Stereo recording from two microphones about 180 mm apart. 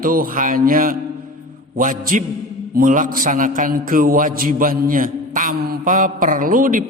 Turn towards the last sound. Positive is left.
turn(degrees=-50)  # may be behind; listen again after turning